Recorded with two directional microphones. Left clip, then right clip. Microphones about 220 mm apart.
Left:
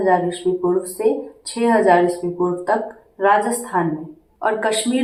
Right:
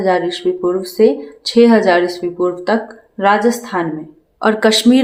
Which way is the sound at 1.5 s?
50° right (ahead or behind).